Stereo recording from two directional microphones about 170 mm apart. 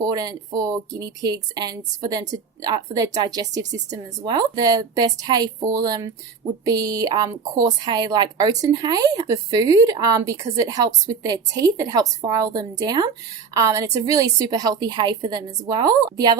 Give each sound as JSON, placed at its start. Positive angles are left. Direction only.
{"t": 0.0, "sound": "a woman's voice", "side_deg": -20}